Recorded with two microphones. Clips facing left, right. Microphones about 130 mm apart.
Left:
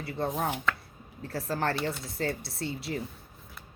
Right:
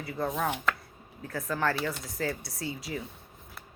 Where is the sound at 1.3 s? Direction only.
35° left (ahead or behind).